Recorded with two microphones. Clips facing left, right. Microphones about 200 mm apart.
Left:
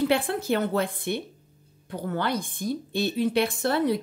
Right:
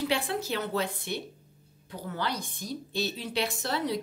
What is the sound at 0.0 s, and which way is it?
Speech, 55° left (ahead or behind).